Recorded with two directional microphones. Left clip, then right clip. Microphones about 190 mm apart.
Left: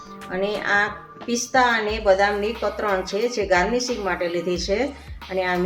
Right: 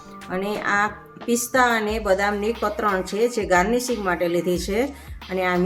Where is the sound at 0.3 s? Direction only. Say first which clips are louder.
Left 1 dB; 55° right (ahead or behind).